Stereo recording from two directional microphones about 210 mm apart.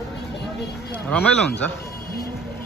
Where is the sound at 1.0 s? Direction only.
5° left (ahead or behind).